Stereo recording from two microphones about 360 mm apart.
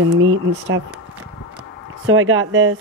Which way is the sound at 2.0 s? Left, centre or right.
Right.